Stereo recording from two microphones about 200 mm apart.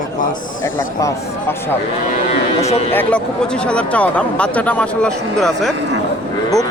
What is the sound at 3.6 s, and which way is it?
Speech, 5° left (ahead or behind).